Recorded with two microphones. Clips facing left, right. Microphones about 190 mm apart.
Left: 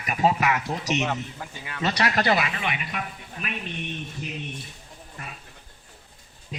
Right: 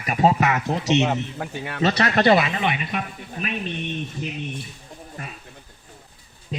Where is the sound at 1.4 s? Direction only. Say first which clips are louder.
Right 8 dB; 60° right (ahead or behind).